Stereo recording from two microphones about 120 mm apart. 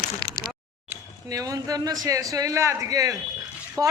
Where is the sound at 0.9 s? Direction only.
30° right (ahead or behind).